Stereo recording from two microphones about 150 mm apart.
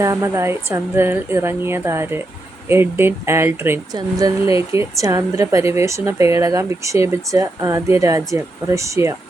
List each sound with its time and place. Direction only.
0.0 s a woman's voice: 20° right (ahead or behind)